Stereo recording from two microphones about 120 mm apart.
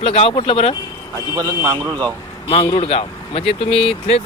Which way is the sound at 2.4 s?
45° left (ahead or behind).